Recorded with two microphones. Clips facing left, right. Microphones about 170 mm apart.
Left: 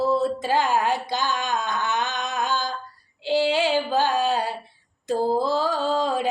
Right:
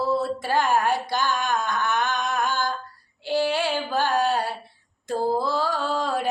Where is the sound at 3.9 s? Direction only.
20° left (ahead or behind).